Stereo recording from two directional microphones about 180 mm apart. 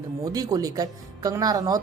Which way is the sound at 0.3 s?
20° right (ahead or behind).